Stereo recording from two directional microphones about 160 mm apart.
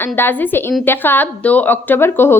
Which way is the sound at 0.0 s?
10° left (ahead or behind).